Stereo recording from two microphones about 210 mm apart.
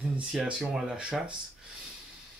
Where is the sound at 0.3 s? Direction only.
5° right (ahead or behind).